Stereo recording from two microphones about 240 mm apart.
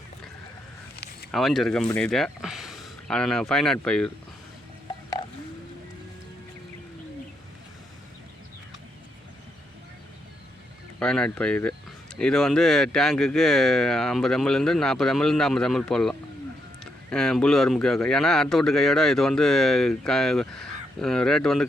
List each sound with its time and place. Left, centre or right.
0.9 s a sound: left
1.3 s speech: centre
11.0 s speech: centre